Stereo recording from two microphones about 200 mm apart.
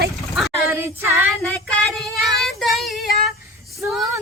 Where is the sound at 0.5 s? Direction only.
10° right (ahead or behind).